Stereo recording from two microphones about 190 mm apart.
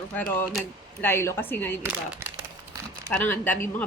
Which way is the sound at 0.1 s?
10° left (ahead or behind).